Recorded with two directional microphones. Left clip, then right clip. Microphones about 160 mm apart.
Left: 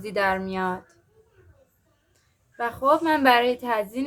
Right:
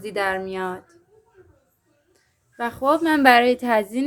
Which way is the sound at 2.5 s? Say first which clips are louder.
Right 1 dB; 20° right (ahead or behind).